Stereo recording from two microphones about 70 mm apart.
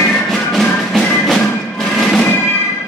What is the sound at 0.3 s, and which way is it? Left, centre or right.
Music, centre.